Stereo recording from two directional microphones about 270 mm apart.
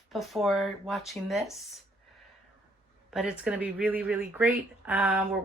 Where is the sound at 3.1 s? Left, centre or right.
Centre.